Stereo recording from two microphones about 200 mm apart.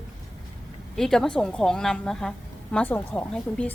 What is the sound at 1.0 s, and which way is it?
A woman's voice, centre (ahead or behind).